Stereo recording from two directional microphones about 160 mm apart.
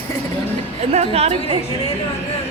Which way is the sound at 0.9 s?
40° right (ahead or behind).